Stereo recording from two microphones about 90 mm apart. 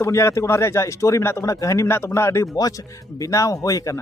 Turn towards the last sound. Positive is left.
turn(degrees=40)  # may be behind; listen again after turning